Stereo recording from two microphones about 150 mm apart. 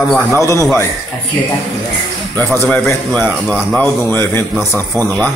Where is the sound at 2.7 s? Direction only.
15° left (ahead or behind).